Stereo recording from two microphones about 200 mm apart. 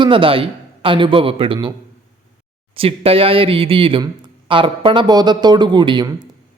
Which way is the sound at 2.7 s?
30° right (ahead or behind).